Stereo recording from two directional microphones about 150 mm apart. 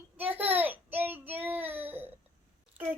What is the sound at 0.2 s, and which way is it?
Child singing, 10° right (ahead or behind).